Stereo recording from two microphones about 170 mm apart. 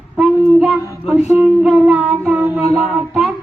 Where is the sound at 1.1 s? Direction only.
10° right (ahead or behind).